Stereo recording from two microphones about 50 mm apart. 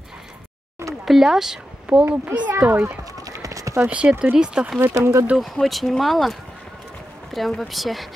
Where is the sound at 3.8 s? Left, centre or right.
Right.